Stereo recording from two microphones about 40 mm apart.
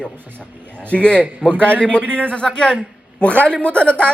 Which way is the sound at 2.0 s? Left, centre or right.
Right.